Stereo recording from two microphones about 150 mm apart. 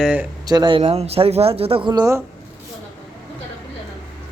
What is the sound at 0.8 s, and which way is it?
Speech, 45° right (ahead or behind).